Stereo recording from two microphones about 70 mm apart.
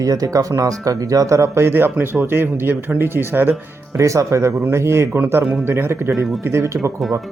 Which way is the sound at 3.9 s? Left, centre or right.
Right.